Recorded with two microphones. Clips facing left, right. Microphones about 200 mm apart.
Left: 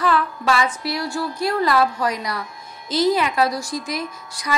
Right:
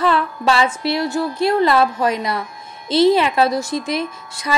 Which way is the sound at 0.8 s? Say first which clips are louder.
Right 5 dB; 25° right (ahead or behind).